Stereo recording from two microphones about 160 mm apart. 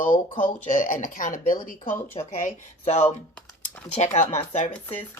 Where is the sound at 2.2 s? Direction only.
45° left (ahead or behind).